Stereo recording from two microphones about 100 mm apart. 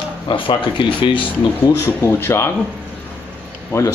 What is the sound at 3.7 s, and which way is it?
Speech, 30° left (ahead or behind).